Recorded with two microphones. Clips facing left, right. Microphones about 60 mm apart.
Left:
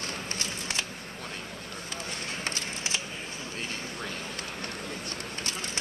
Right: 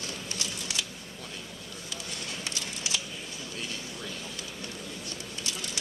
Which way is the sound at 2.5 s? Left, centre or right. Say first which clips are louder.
Left 2 dB; left.